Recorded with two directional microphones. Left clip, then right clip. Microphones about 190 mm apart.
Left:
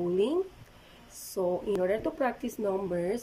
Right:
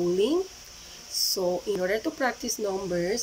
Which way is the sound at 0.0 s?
5° left (ahead or behind).